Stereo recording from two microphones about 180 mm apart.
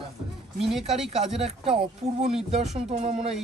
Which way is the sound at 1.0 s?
35° right (ahead or behind).